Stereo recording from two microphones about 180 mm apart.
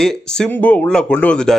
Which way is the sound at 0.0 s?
5° left (ahead or behind).